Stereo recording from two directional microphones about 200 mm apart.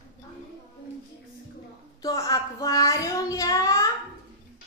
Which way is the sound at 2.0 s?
15° left (ahead or behind).